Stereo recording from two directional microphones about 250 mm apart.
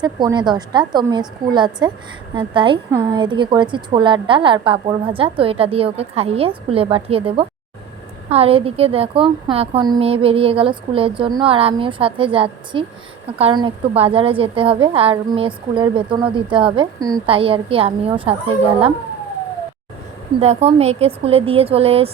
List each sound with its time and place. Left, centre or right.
0.0 s a woman's voice: centre
20.4 s a woman's voice: right